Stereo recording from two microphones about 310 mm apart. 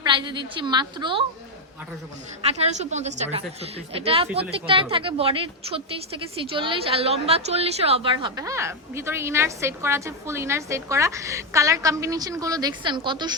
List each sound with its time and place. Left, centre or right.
0.0 s a woman's voice: centre
2.4 s a woman's voice: right